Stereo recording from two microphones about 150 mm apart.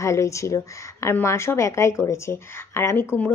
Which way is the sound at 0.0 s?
20° left (ahead or behind).